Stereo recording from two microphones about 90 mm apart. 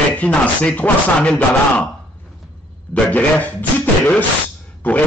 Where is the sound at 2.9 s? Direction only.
20° left (ahead or behind).